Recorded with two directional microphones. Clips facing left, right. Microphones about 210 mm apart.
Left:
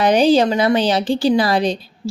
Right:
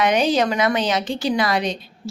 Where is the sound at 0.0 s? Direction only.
30° left (ahead or behind).